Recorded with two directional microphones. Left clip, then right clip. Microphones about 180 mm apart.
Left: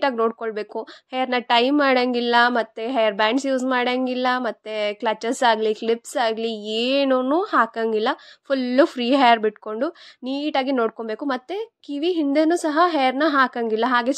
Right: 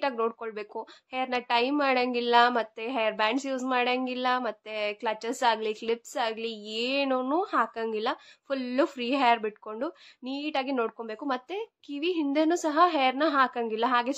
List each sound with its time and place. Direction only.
0.0 s a woman's voice: 35° left (ahead or behind)